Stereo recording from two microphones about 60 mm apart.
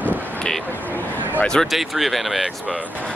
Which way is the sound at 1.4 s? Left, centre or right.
Centre.